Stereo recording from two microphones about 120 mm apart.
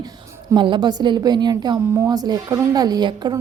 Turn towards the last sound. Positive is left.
turn(degrees=-35)  # may be behind; listen again after turning